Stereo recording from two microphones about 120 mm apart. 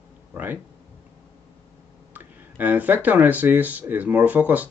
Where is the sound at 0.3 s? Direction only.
15° right (ahead or behind).